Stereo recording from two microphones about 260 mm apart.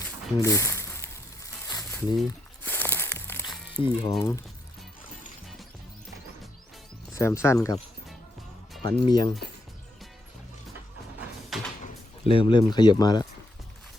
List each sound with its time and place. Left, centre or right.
0.0 s a sound: centre
3.8 s speech: centre
4.2 s speech: centre
7.1 s speech: centre
8.8 s speech: centre
11.5 s door: centre
12.3 s speech: centre